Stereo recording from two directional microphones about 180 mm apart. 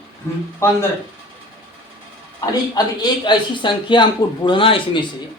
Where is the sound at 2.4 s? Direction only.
20° left (ahead or behind).